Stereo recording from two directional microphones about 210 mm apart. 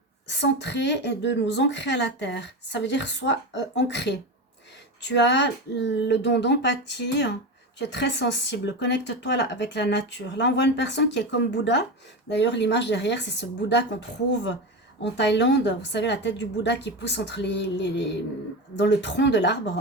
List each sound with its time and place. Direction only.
0.3 s speech: 55° left (ahead or behind)
15.0 s speech: 55° left (ahead or behind)